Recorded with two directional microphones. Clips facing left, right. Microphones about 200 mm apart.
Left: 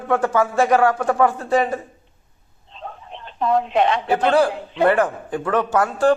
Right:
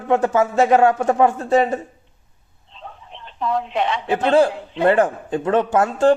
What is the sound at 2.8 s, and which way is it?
Telephone, 45° left (ahead or behind).